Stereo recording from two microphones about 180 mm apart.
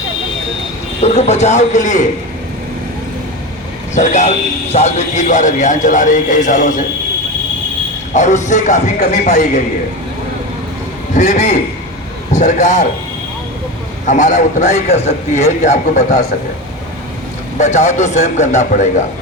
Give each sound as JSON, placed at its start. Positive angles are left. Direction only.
{"t": 1.0, "sound": "a man's voice", "side_deg": 35}
{"t": 3.9, "sound": "a man's voice", "side_deg": 40}
{"t": 8.1, "sound": "speech", "side_deg": 40}
{"t": 11.2, "sound": "a man's voice", "side_deg": 40}
{"t": 14.1, "sound": "a man's voice", "side_deg": 45}
{"t": 17.6, "sound": "a man's voice", "side_deg": 40}